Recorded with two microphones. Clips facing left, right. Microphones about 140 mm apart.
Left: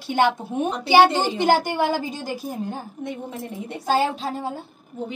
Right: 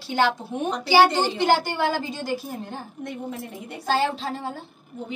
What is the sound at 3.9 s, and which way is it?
Speech, 15° left (ahead or behind).